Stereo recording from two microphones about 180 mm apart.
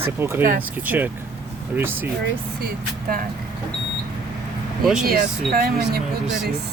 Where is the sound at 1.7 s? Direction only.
10° right (ahead or behind).